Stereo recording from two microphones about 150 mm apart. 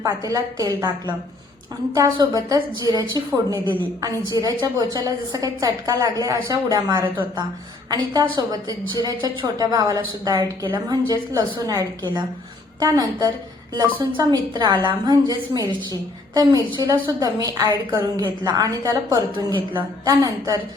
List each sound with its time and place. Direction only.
0.0 s a woman's voice: 25° right (ahead or behind)